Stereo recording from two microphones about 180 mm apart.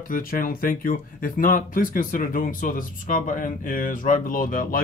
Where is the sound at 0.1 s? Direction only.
50° left (ahead or behind).